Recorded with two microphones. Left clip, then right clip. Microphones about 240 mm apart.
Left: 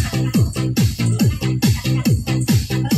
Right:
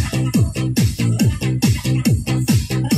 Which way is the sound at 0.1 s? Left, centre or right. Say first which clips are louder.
Right 2 dB; right.